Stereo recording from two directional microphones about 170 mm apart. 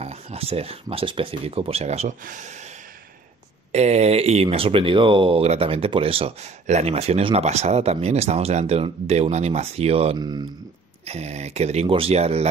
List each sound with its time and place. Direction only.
0.0 s speech: 35° right (ahead or behind)
3.7 s speech: 40° right (ahead or behind)
11.1 s speech: 40° right (ahead or behind)